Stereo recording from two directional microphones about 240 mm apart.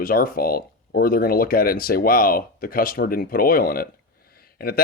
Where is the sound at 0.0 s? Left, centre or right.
Left.